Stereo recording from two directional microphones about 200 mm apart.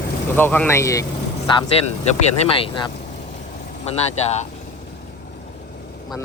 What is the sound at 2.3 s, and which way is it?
Speech, 30° left (ahead or behind).